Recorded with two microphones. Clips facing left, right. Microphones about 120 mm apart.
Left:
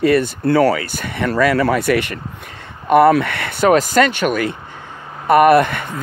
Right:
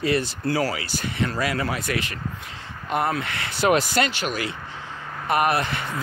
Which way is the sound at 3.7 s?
45° left (ahead or behind).